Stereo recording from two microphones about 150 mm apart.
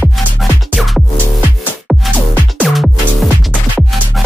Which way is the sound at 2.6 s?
Centre (ahead or behind).